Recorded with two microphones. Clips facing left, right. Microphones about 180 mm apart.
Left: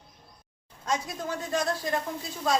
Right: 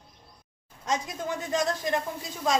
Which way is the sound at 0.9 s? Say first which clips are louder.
Right 1 dB; 20° right (ahead or behind).